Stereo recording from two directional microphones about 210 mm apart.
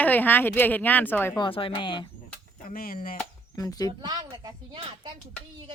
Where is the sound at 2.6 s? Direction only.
40° left (ahead or behind).